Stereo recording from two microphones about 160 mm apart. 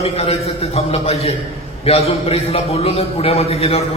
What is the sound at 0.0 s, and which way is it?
A man's voice, 40° left (ahead or behind).